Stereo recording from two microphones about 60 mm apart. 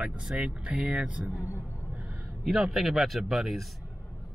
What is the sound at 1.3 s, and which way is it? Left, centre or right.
Speech, left.